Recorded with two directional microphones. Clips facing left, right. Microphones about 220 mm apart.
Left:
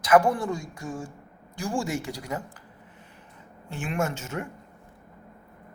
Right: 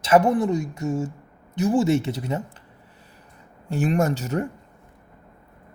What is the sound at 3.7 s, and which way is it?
Speech, 35° right (ahead or behind).